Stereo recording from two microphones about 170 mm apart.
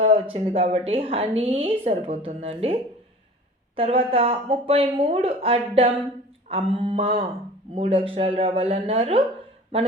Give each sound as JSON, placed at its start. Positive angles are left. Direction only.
{"t": 0.0, "sound": "a woman's voice", "side_deg": -30}
{"t": 3.8, "sound": "a woman's voice", "side_deg": -35}